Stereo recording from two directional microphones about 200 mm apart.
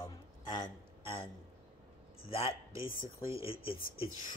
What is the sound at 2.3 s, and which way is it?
Speech, 30° left (ahead or behind).